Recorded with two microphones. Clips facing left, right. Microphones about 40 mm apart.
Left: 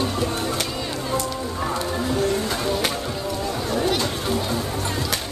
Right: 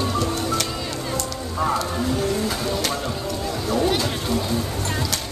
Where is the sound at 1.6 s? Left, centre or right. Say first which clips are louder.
Right 4 dB; centre.